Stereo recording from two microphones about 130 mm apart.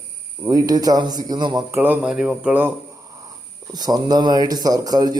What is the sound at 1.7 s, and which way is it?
Speech, 15° right (ahead or behind).